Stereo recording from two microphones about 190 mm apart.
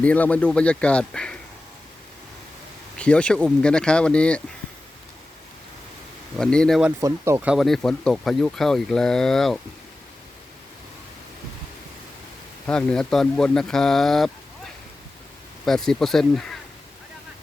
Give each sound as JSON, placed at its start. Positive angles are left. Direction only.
{"t": 0.0, "sound": "speech", "side_deg": 5}
{"t": 3.0, "sound": "speech", "side_deg": 5}
{"t": 6.3, "sound": "speech", "side_deg": 5}
{"t": 7.0, "sound": "speech", "side_deg": -15}
{"t": 12.6, "sound": "speech", "side_deg": 5}
{"t": 15.6, "sound": "speech", "side_deg": 0}